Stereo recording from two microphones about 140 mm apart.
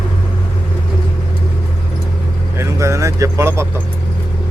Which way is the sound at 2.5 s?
20° right (ahead or behind).